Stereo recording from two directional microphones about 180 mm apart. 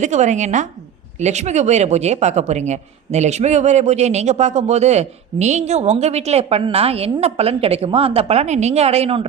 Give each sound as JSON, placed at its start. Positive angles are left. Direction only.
{"t": 0.0, "sound": "a man's voice", "side_deg": -40}